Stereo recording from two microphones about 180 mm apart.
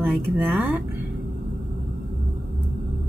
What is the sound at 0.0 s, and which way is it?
Speech, 10° right (ahead or behind).